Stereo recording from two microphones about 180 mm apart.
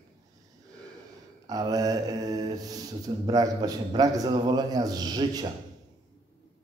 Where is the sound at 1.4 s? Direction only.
20° right (ahead or behind).